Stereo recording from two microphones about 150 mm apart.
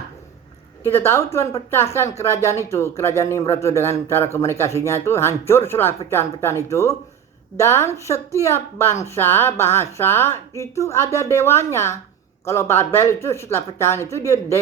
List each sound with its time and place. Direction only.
0.8 s speech: 15° left (ahead or behind)